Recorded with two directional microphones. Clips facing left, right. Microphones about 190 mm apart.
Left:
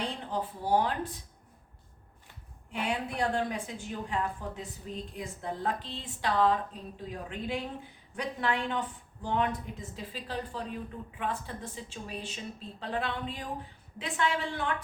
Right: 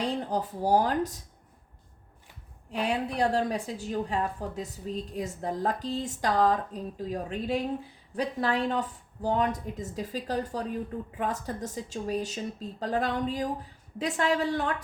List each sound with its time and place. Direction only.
0.0 s speech: 40° right (ahead or behind)
2.7 s speech: 35° right (ahead or behind)